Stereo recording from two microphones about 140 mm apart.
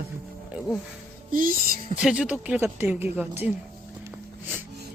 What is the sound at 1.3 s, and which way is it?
Speech, 80° right.